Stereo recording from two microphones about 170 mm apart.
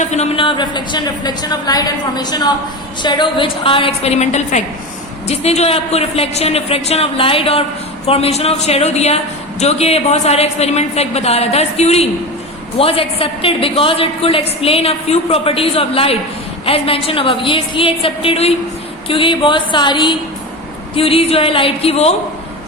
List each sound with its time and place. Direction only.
0.0 s a woman's voice: 40° left (ahead or behind)